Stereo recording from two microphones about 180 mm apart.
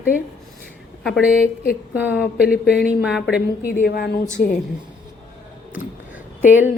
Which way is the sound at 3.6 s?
55° left (ahead or behind).